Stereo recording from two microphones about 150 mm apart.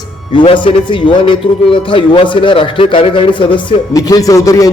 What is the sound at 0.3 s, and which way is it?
A man's voice, 35° left (ahead or behind).